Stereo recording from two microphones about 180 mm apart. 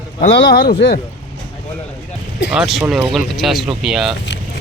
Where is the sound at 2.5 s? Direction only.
5° right (ahead or behind).